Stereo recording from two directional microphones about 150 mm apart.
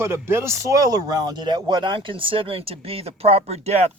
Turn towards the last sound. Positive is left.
turn(degrees=-45)  # may be behind; listen again after turning